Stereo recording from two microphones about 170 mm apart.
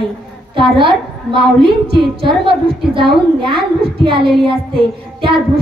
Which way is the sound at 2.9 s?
30° right (ahead or behind).